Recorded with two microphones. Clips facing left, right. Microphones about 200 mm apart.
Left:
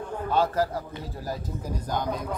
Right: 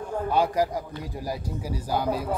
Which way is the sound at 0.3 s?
10° right (ahead or behind).